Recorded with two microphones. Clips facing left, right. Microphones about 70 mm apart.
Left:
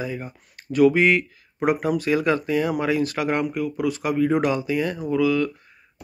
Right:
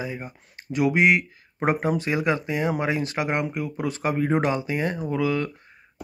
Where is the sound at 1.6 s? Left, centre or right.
Right.